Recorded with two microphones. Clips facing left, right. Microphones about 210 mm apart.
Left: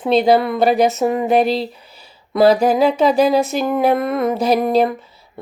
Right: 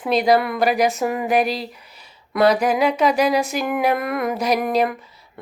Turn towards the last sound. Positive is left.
turn(degrees=30)  # may be behind; listen again after turning